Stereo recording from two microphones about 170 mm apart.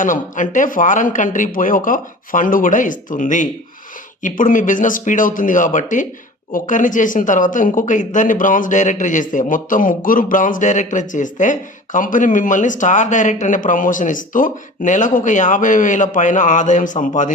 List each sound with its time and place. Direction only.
0.0 s speech: 50° left (ahead or behind)